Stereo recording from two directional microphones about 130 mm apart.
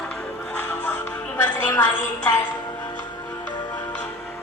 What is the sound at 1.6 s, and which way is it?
Music, 15° left (ahead or behind).